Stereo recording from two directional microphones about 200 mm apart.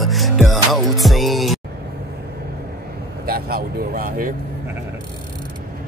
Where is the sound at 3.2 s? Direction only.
50° right (ahead or behind).